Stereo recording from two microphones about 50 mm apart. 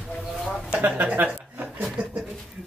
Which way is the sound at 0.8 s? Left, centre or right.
Right.